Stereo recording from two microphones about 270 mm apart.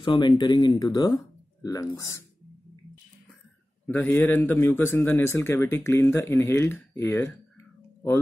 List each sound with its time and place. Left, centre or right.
0.0 s speech: centre
3.8 s speech: centre